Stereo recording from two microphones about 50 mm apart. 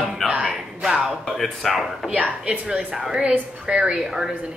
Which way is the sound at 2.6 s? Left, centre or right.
Centre.